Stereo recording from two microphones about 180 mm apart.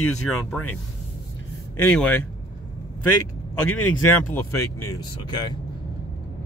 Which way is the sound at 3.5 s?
10° left (ahead or behind).